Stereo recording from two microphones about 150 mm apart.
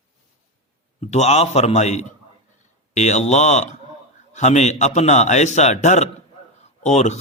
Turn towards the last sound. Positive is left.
turn(degrees=50)  # may be behind; listen again after turning